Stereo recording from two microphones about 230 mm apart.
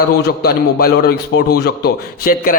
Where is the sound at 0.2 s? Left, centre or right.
Left.